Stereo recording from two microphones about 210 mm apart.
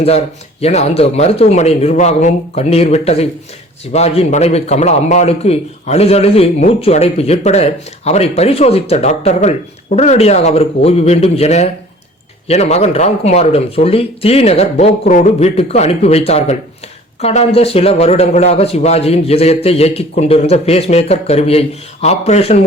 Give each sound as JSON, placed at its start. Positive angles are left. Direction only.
{"t": 0.6, "sound": "a man's voice", "side_deg": 30}